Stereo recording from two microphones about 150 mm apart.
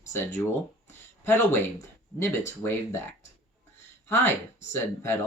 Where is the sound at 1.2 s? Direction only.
15° left (ahead or behind).